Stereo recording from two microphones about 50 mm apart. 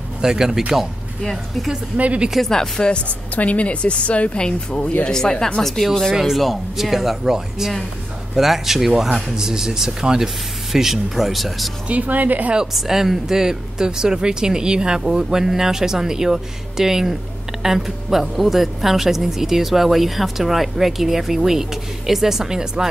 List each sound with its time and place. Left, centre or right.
0.2 s speech: centre
2.0 s speech: right
2.4 s speech: centre
3.3 s speech: left; by 11.7 s centre
11.9 s a woman's voice: right
12.7 s speech: centre